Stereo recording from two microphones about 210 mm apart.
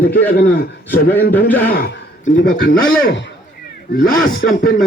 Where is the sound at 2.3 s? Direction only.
45° left (ahead or behind).